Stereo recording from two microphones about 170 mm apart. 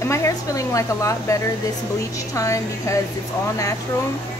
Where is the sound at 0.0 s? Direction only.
15° left (ahead or behind).